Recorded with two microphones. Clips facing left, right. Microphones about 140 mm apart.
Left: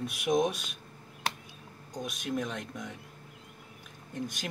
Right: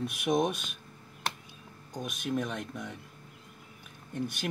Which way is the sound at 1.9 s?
5° right (ahead or behind).